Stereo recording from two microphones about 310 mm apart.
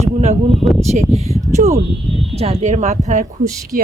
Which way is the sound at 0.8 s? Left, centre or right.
Right.